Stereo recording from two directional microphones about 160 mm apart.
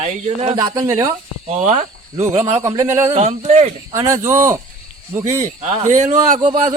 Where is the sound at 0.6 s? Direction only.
25° right (ahead or behind).